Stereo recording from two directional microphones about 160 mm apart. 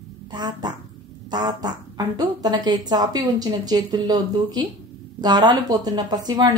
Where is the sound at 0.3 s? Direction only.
25° right (ahead or behind).